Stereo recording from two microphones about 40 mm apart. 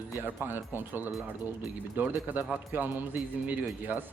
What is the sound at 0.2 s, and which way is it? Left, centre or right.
Speech, right.